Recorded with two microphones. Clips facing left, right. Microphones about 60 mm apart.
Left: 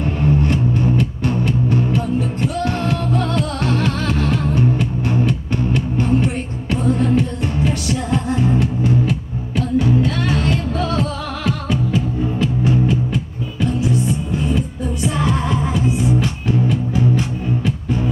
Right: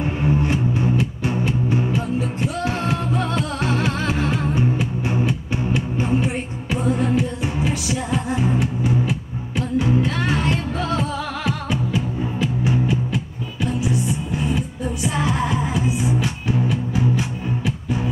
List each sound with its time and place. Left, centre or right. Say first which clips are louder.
0.2 s music: left 3 dB; centre
15.0 s music: left 2 dB; centre